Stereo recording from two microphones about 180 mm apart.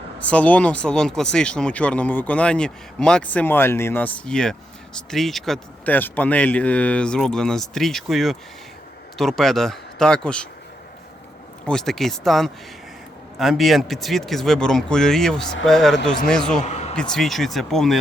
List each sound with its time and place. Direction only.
0.2 s speech: 5° left (ahead or behind)
11.6 s speech: 5° left (ahead or behind)
16.6 s a sound: 40° left (ahead or behind)
16.9 s speech: 5° left (ahead or behind)